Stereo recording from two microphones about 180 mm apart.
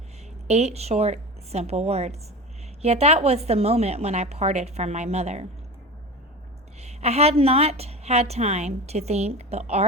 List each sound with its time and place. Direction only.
0.4 s a woman's voice: 35° right (ahead or behind)
6.7 s a woman's voice: 35° right (ahead or behind)